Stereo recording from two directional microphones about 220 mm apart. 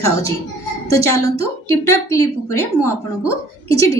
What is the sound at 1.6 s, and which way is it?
A woman's voice, 15° left (ahead or behind).